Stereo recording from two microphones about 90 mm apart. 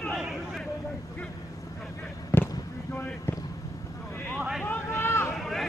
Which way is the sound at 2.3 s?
20° left (ahead or behind).